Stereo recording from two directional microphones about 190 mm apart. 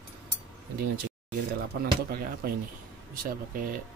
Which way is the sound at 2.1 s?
50° right (ahead or behind).